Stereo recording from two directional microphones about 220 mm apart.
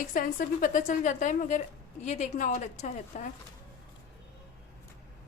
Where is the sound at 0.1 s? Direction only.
40° left (ahead or behind).